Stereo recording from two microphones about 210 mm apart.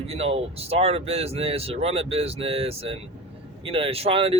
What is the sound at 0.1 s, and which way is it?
Speech, 30° right (ahead or behind).